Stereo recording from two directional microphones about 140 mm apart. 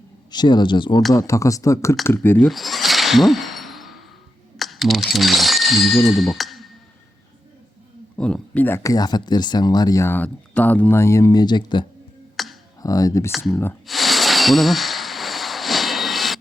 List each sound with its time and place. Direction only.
0.3 s speech: 30° left (ahead or behind)
2.4 s a sound: centre (ahead or behind)
4.5 s computer keyboard: centre (ahead or behind)
5.1 s speech: centre (ahead or behind)
8.2 s speech: 10° left (ahead or behind); by 11.9 s 35° left (ahead or behind)
12.4 s music: centre (ahead or behind)
12.8 s speech: 25° left (ahead or behind)
13.3 s speech: centre (ahead or behind)
13.8 s a sound: centre (ahead or behind)